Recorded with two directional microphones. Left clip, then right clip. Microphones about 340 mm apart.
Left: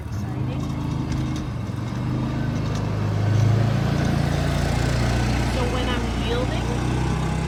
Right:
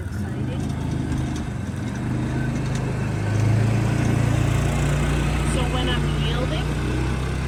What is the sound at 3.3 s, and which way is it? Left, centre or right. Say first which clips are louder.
Vehicle: even; left.